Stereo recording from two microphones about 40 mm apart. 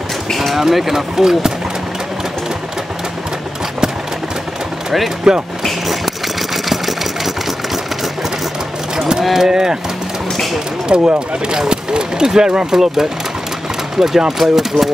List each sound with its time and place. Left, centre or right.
0.3 s a sound: centre
0.6 s speech: centre
5.3 s speech: centre
5.6 s camera: centre
9.2 s speech: centre
10.9 s speech: right